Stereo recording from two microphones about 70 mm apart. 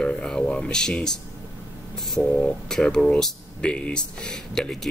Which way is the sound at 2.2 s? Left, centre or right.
Centre.